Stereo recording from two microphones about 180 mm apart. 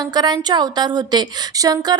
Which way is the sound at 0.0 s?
25° right (ahead or behind).